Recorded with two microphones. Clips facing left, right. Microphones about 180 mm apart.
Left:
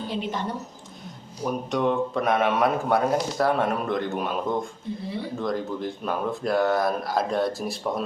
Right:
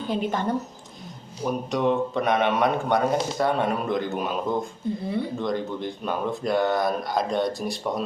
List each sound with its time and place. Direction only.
0.1 s a woman's voice: 50° right (ahead or behind)
1.5 s a man's voice: centre (ahead or behind)